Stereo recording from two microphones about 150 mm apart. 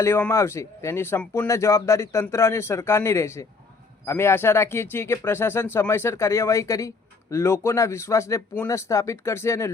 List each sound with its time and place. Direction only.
0.0 s speech: 15° left (ahead or behind)